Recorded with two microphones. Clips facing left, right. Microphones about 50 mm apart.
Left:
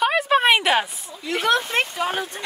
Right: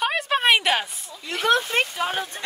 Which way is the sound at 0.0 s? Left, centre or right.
Centre.